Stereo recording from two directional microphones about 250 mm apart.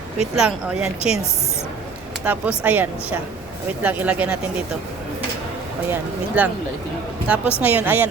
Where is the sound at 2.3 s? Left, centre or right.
Centre.